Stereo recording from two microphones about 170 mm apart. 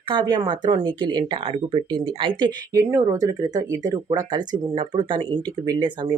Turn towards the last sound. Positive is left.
turn(degrees=-25)  # may be behind; listen again after turning